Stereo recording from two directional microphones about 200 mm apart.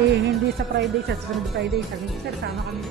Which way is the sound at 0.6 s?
50° right (ahead or behind).